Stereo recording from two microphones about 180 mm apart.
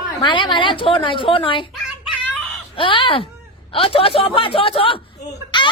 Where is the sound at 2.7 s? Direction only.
30° left (ahead or behind).